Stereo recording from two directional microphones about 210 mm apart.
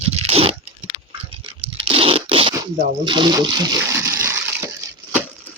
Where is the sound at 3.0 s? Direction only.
20° right (ahead or behind).